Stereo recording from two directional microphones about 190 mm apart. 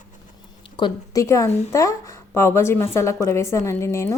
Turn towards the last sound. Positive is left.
turn(degrees=15)  # may be behind; listen again after turning